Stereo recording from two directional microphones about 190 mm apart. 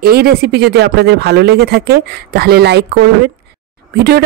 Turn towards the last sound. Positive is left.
turn(degrees=-55)  # may be behind; listen again after turning